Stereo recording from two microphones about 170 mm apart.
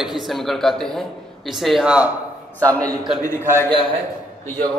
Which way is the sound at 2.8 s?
20° right (ahead or behind).